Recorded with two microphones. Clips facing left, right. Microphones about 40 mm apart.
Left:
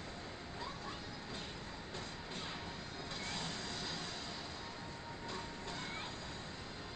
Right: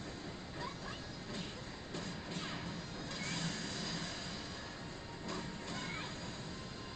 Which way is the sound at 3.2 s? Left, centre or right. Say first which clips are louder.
Right 2 dB; left.